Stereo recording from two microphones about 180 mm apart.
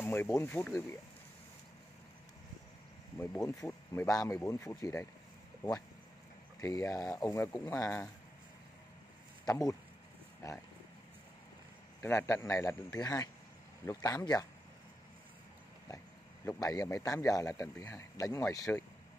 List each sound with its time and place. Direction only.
0.0 s speech: 10° left (ahead or behind)
3.2 s speech: 15° left (ahead or behind)
9.5 s speech: 20° left (ahead or behind)
12.0 s speech: 15° left (ahead or behind)
16.4 s speech: 20° left (ahead or behind)